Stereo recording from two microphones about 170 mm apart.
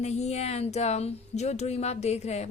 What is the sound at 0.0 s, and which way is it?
A woman's voice, 40° left (ahead or behind).